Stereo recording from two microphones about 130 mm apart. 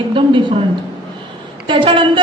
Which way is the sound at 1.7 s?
40° right (ahead or behind).